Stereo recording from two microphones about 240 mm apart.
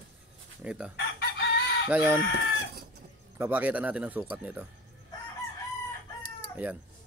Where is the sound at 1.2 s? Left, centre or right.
Left.